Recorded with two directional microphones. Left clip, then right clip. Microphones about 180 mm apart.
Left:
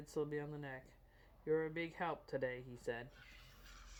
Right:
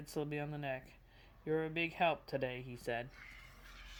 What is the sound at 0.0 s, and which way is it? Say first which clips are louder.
Speech: right 1 dB; 35° right (ahead or behind).